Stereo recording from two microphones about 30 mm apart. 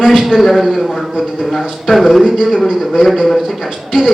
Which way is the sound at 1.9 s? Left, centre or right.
Centre.